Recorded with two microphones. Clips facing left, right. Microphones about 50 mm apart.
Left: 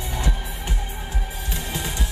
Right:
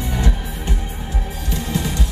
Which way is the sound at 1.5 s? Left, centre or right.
Left.